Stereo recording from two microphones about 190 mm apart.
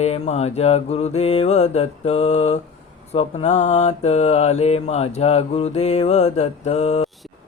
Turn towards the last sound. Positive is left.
turn(degrees=35)  # may be behind; listen again after turning